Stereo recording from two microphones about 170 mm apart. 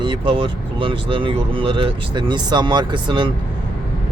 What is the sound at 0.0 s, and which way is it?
Speech, 30° right (ahead or behind).